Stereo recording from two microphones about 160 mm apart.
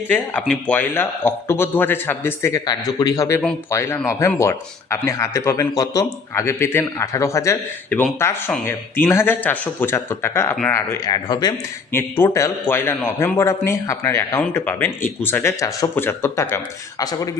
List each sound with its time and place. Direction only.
0.1 s speech: 10° left (ahead or behind); by 11.5 s 25° left (ahead or behind)
11.9 s speech: 15° left (ahead or behind)